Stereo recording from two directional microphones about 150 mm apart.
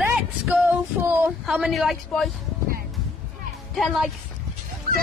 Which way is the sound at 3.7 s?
Centre (ahead or behind).